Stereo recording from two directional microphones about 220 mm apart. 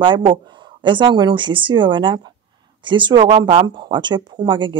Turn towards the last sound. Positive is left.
turn(degrees=-20)  # may be behind; listen again after turning